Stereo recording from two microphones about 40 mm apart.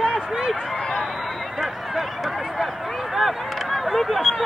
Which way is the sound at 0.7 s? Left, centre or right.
Centre.